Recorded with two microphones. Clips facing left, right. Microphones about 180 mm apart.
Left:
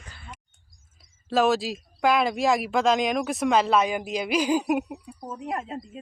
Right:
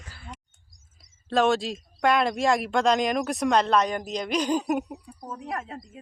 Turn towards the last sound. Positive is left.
turn(degrees=20)  # may be behind; listen again after turning